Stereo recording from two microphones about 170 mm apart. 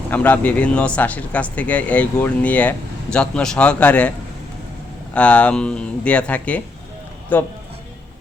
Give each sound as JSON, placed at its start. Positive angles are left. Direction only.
{"t": 0.1, "sound": "speech", "side_deg": 10}
{"t": 5.1, "sound": "speech", "side_deg": 5}